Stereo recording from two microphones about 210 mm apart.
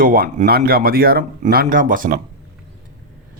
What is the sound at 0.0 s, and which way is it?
Speech, 40° right (ahead or behind).